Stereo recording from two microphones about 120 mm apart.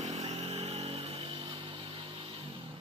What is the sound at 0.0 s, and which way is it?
Vehicle, 65° right (ahead or behind).